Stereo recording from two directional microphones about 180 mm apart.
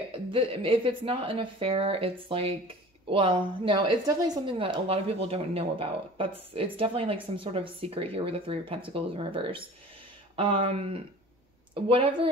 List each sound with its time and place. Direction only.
0.3 s a woman's voice: 30° right (ahead or behind)